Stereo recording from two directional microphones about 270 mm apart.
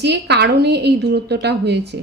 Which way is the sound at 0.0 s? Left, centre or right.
Right.